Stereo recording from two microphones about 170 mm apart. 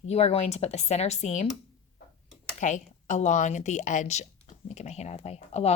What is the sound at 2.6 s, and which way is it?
Speech, 45° left (ahead or behind).